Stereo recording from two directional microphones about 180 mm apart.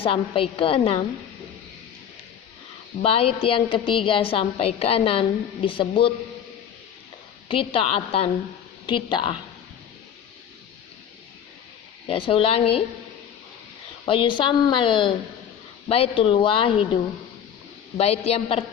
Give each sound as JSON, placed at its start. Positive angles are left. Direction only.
{"t": 0.0, "sound": "a woman's voice", "side_deg": 30}
{"t": 3.0, "sound": "a woman's voice", "side_deg": 35}
{"t": 7.4, "sound": "a woman's voice", "side_deg": 30}
{"t": 12.0, "sound": "a woman's voice", "side_deg": 30}
{"t": 14.0, "sound": "a woman's voice", "side_deg": 30}